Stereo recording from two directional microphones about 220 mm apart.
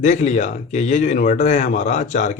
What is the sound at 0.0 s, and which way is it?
Speech, 35° left (ahead or behind).